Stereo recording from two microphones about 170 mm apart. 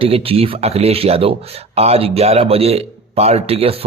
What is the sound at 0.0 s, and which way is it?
Speech, 35° right (ahead or behind).